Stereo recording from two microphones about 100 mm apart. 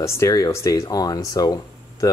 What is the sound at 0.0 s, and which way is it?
Speech, 35° left (ahead or behind).